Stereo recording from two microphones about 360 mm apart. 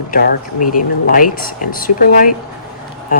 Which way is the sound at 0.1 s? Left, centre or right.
Left.